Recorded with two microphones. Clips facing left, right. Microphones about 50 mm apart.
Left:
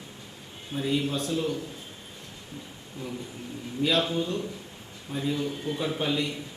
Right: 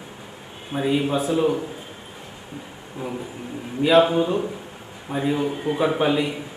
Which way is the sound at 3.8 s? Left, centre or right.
Right.